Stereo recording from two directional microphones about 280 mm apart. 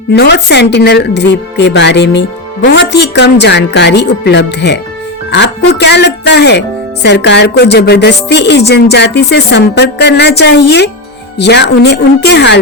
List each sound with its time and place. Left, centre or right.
0.1 s speech: left